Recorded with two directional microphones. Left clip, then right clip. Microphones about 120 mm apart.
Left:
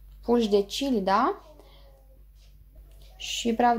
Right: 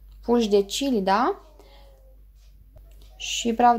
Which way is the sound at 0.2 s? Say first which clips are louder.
Right 3 dB; 20° right (ahead or behind).